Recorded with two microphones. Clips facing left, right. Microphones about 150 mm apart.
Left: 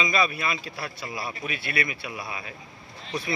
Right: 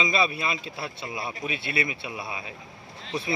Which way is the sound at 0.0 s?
25° right (ahead or behind).